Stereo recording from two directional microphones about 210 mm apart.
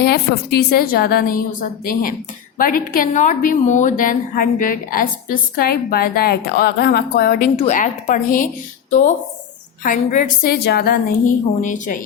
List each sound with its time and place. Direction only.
0.0 s a woman's voice: 50° left (ahead or behind)
7.5 s a woman's voice: 30° left (ahead or behind)
10.4 s a woman's voice: 50° left (ahead or behind)
11.6 s a woman's voice: 40° left (ahead or behind)